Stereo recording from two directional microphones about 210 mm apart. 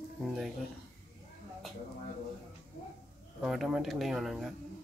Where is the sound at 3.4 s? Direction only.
Centre (ahead or behind).